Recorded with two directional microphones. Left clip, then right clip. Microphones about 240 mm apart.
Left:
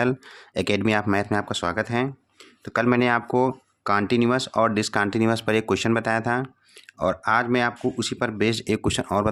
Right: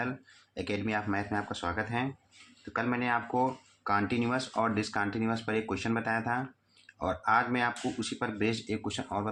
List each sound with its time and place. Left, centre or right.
0.5 s speech: left